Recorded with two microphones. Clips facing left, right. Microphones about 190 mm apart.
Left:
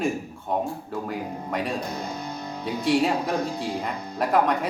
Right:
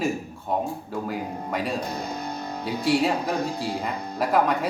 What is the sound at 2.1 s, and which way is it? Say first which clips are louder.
Music: right 2 dB; 55° right (ahead or behind).